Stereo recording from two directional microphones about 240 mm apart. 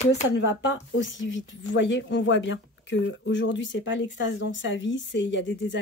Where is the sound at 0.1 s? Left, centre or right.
Left.